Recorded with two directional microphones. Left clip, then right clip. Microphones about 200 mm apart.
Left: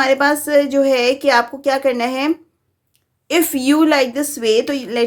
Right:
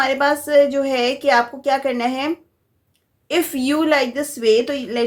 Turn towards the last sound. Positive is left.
turn(degrees=40)  # may be behind; listen again after turning